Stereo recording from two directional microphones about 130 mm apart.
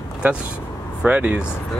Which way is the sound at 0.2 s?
15° right (ahead or behind).